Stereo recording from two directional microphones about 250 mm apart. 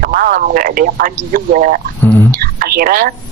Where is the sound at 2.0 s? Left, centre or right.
Centre.